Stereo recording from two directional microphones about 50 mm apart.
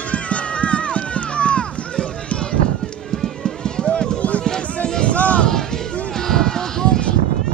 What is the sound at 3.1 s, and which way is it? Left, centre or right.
Run, centre.